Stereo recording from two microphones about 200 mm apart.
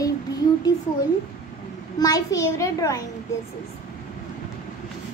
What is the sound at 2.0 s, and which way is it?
Child singing, 15° left (ahead or behind).